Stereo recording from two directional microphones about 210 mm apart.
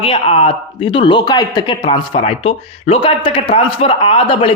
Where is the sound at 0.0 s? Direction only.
25° left (ahead or behind).